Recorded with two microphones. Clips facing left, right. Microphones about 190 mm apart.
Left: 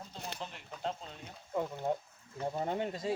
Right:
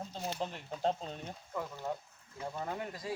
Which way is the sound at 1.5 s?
25° left (ahead or behind).